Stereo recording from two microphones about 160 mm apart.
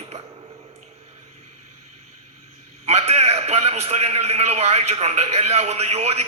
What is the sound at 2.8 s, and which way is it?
A man's voice, 40° right (ahead or behind).